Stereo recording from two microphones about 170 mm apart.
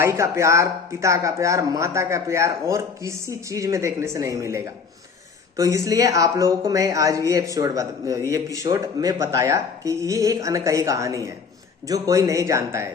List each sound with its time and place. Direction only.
0.0 s speech: 15° right (ahead or behind)